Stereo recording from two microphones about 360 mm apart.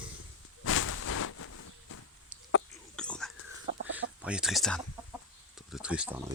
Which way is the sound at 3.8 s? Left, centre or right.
Right.